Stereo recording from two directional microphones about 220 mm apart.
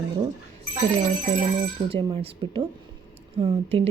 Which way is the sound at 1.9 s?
25° right (ahead or behind).